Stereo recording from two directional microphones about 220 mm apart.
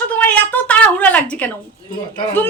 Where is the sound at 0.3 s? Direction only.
5° left (ahead or behind).